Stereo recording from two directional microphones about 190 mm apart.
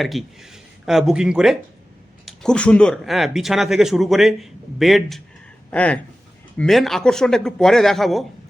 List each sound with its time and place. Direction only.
0.0 s speech: centre (ahead or behind)